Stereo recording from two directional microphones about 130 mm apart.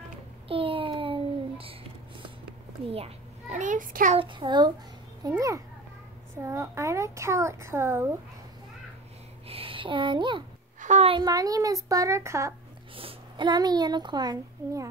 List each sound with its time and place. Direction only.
0.5 s a sound: 45° right (ahead or behind)
2.9 s a child's voice: 55° right (ahead or behind); by 4.2 s 85° right
4.2 s a child's voice: 40° right (ahead or behind); by 8.2 s 20° right (ahead or behind)
9.5 s speech: 45° right (ahead or behind)
10.8 s a sound: 65° right (ahead or behind)
11.2 s a woman's voice: 30° right (ahead or behind)
12.9 s a woman's voice: 40° right (ahead or behind)